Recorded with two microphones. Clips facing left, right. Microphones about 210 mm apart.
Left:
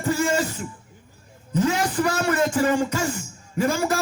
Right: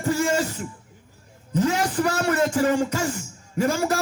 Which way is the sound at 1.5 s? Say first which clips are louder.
Even; 40° right (ahead or behind).